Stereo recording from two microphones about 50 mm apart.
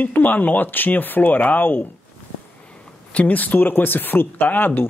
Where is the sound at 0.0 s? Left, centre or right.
Left.